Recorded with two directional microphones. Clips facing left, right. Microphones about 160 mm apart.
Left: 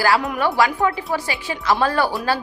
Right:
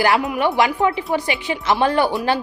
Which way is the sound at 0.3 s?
20° right (ahead or behind).